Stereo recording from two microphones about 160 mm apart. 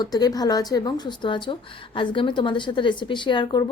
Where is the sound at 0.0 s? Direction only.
25° left (ahead or behind).